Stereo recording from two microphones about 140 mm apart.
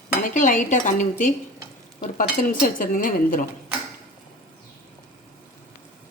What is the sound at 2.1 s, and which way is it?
Speech, 75° left (ahead or behind).